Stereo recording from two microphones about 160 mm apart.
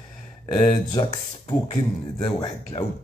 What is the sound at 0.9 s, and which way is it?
Speech, 30° left (ahead or behind).